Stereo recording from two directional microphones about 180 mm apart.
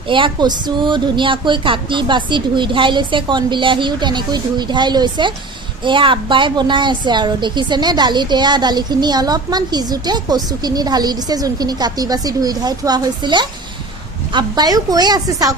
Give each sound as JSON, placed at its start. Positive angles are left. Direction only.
{"t": 0.1, "sound": "a woman's voice", "side_deg": -25}